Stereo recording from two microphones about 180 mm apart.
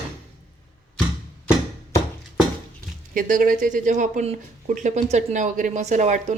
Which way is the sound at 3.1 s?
45° right (ahead or behind).